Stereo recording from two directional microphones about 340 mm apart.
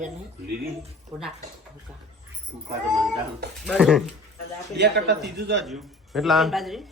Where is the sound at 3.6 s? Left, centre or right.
Centre.